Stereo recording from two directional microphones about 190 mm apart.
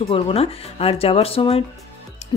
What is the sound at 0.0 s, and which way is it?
Speech, 30° left (ahead or behind).